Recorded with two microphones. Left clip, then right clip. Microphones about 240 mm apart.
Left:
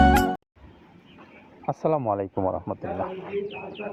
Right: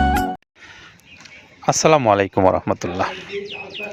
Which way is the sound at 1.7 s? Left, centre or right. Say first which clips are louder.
Right 10 dB; right.